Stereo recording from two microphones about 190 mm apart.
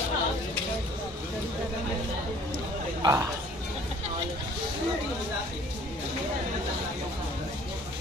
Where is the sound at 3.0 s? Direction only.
15° right (ahead or behind).